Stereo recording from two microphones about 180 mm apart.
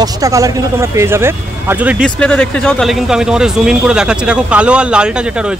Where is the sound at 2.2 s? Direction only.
5° left (ahead or behind).